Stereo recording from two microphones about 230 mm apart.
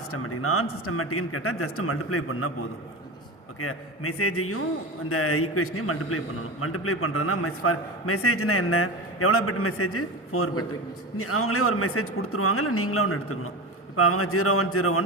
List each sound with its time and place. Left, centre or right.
0.1 s a man's voice: left